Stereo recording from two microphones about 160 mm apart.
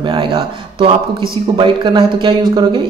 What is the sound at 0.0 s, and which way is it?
Speech, 30° right (ahead or behind).